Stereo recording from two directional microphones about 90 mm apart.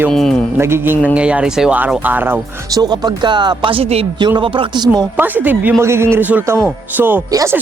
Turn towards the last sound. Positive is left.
turn(degrees=-20)  # may be behind; listen again after turning